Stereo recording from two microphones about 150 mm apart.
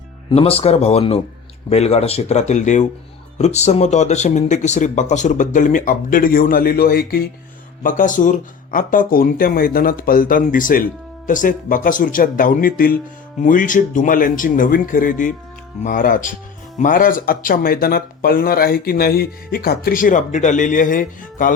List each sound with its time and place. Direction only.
0.3 s speech: 40° left (ahead or behind); by 7.3 s 90° left
7.8 s speech: 60° left (ahead or behind)
13.4 s speech: 60° left (ahead or behind)